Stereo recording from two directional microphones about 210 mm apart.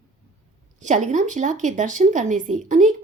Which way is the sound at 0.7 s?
35° right (ahead or behind).